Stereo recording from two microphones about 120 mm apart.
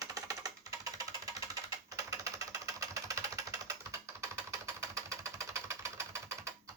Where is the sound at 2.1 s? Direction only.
25° right (ahead or behind).